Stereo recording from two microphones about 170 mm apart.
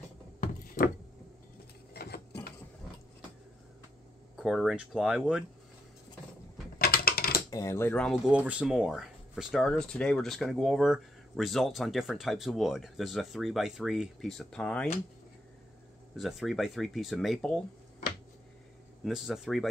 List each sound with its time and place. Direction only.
0.4 s a sound: 55° left (ahead or behind)
2.0 s a sound: 65° left (ahead or behind)
4.4 s speech: centre (ahead or behind)
6.8 s mechanisms: 60° left (ahead or behind)
7.5 s speech: 15° left (ahead or behind)
16.2 s speech: centre (ahead or behind)
19.0 s speech: centre (ahead or behind)